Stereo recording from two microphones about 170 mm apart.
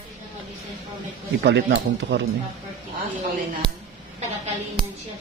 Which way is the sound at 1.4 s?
90° right.